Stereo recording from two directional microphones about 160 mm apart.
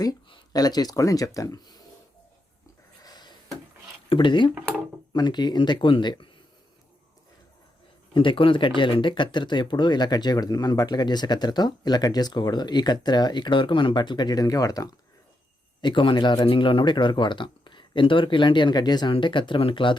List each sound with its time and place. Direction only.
0.0 s speech: 30° left (ahead or behind)
3.0 s a sound: 25° left (ahead or behind)
4.1 s speech: 30° left (ahead or behind)
8.1 s speech: 30° left (ahead or behind)